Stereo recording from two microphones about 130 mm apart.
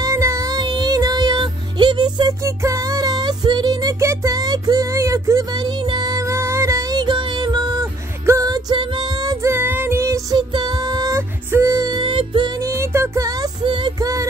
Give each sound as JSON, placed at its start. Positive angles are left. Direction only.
{"t": 0.0, "sound": "music", "side_deg": -25}
{"t": 2.4, "sound": "music", "side_deg": -25}
{"t": 10.3, "sound": "music", "side_deg": -35}
{"t": 12.0, "sound": "music", "side_deg": -40}
{"t": 12.6, "sound": "music", "side_deg": -20}
{"t": 13.7, "sound": "music", "side_deg": -40}